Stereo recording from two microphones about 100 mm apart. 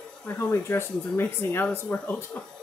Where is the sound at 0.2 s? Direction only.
20° left (ahead or behind).